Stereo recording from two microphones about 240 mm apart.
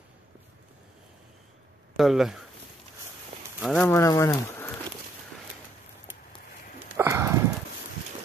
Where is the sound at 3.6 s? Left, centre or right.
Centre.